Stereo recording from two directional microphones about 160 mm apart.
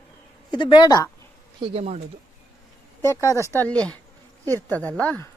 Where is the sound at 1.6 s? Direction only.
40° right (ahead or behind).